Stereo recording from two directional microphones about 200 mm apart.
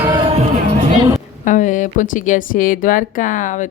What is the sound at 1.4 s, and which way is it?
Speech, 40° left (ahead or behind).